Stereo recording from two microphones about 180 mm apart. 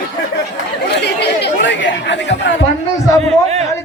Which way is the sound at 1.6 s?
80° left.